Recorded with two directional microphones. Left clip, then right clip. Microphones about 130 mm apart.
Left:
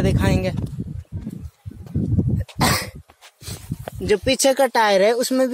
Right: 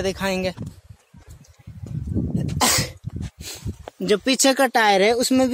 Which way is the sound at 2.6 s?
30° right (ahead or behind).